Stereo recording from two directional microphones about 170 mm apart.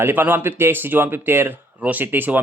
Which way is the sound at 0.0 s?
10° right (ahead or behind).